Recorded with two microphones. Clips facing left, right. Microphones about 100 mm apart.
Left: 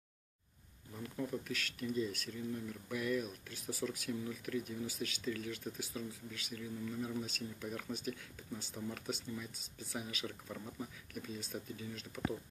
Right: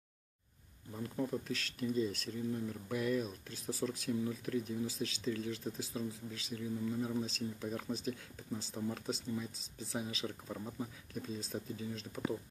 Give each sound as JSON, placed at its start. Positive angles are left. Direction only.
{"t": 1.0, "sound": "speech", "side_deg": -30}